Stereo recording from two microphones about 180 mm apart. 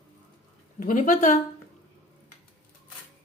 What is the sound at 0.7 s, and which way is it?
Speech, 45° left (ahead or behind).